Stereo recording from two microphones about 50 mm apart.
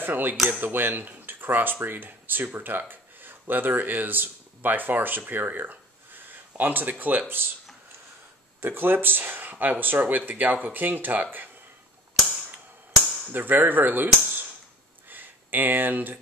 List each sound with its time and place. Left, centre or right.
0.0 s speech: right
8.5 s speech: right
13.3 s speech: right
15.0 s a sound: right